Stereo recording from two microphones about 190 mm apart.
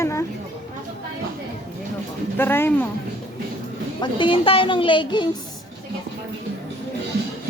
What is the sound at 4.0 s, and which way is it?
Speech, 25° left (ahead or behind).